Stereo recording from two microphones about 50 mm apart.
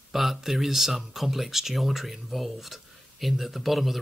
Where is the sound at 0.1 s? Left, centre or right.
Centre.